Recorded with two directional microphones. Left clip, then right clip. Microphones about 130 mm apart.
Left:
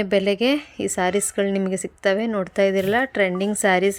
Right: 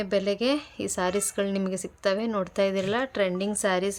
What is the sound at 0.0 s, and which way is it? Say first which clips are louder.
Speech: left 6 dB; 40° left (ahead or behind).